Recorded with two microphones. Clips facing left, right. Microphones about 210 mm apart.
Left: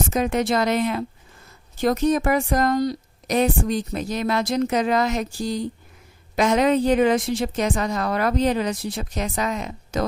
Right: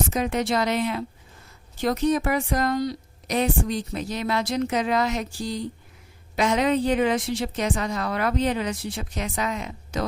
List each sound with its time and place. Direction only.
0.1 s speech: 50° left (ahead or behind)